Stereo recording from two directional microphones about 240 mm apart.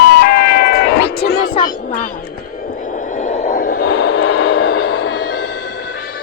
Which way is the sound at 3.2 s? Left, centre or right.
Left.